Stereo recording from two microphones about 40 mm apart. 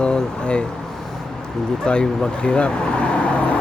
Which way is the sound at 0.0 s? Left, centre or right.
Left.